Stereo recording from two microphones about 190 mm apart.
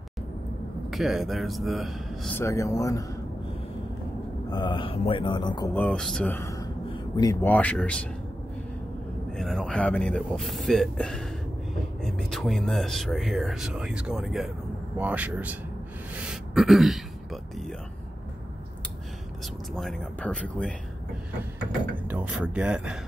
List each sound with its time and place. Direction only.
0.8 s speech: centre (ahead or behind)
2.3 s speech: 15° left (ahead or behind)
4.5 s a man's voice: 25° left (ahead or behind)
5.7 s speech: 10° left (ahead or behind)
9.4 s a man's voice: centre (ahead or behind)
16.3 s a sound: centre (ahead or behind)
19.7 s speech: centre (ahead or behind)
21.9 s speech: 10° right (ahead or behind)